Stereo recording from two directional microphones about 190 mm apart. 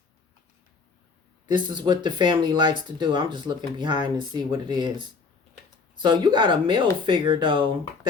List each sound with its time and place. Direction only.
1.5 s speech: 25° right (ahead or behind)